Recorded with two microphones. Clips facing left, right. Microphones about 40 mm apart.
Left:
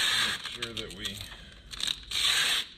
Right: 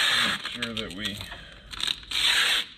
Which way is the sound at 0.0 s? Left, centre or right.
Right.